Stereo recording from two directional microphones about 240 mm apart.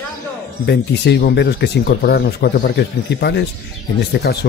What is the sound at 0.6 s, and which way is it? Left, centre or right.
Speech, left.